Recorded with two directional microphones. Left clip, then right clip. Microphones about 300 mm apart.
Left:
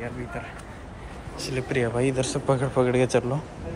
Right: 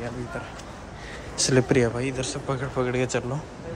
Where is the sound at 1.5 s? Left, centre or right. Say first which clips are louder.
Right 5 dB; centre.